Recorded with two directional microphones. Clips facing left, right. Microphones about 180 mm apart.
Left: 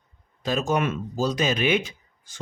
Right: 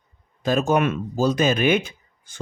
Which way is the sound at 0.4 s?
55° right (ahead or behind).